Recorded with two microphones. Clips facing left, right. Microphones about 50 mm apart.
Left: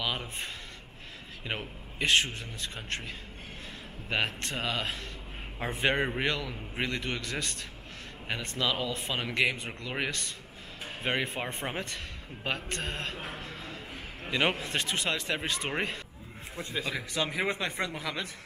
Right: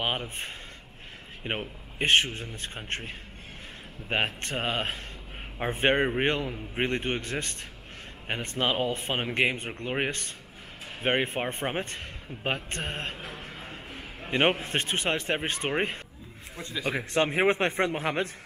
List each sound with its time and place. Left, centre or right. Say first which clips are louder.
1.4 s a man's voice: right 4 dB; right
4.1 s speech: right 2 dB; right
13.4 s a sound: even; right
14.6 s speech: right 2 dB; right
16.8 s a man's voice: right 9 dB; right